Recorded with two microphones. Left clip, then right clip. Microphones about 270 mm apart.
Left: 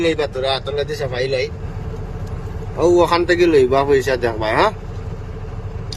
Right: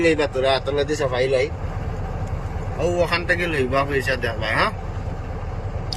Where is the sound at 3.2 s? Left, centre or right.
Centre.